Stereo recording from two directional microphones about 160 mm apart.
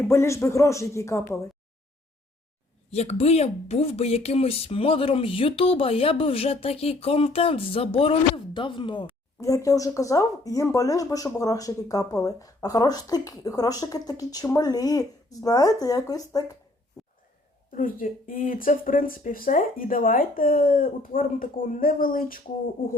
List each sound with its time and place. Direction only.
0.1 s speech: 15° left (ahead or behind)
2.9 s speech: 40° left (ahead or behind); by 16.5 s 25° left (ahead or behind)
17.7 s speech: 60° left (ahead or behind)